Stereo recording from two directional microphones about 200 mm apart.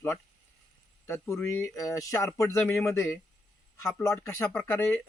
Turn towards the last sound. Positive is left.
turn(degrees=10)  # may be behind; listen again after turning